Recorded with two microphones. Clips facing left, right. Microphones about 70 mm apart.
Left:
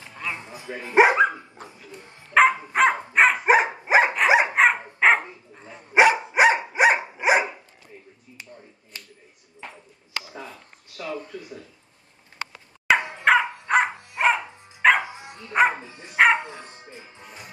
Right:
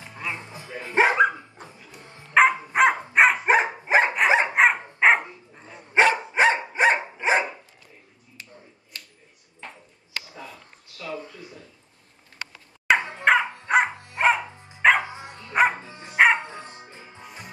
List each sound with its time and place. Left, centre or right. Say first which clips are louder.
0.0 s music: even; centre
0.7 s speech: left 2 dB; left
1.1 s dog: even; centre
4.6 s dog: even; centre
5.9 s dog: left 2 dB; centre
8.9 s finger snapping: even; left
12.8 s dog: even; centre
15.5 s music: left 1 dB; centre